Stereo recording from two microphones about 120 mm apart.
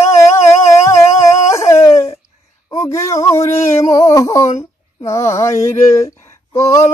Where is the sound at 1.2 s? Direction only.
25° left (ahead or behind).